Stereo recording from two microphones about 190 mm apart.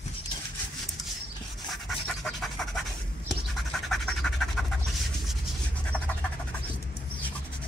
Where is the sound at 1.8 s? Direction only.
Centre (ahead or behind).